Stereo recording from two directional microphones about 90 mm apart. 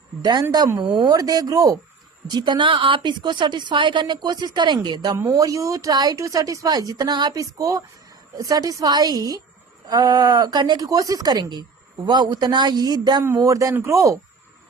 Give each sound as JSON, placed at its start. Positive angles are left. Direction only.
{"t": 0.2, "sound": "a woman's voice", "side_deg": -55}
{"t": 0.9, "sound": "speech", "side_deg": -90}
{"t": 1.1, "sound": "speech", "side_deg": -45}
{"t": 2.2, "sound": "a woman's voice", "side_deg": -55}
{"t": 5.1, "sound": "speech", "side_deg": -35}
{"t": 13.3, "sound": "speech", "side_deg": -35}